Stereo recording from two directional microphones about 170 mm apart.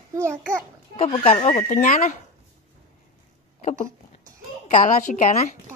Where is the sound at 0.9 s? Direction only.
40° left (ahead or behind).